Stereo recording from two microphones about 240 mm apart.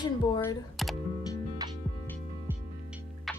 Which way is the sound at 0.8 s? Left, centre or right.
Centre.